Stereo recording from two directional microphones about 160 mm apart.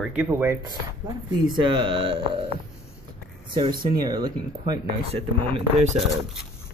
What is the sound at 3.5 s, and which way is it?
Speech, 30° right (ahead or behind).